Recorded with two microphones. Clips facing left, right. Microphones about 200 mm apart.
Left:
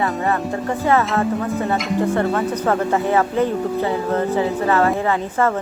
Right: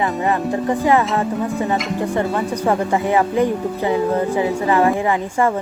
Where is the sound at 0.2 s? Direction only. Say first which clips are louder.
Right 1 dB; 15° right (ahead or behind).